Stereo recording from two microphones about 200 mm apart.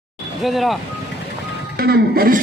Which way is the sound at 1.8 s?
50° right (ahead or behind).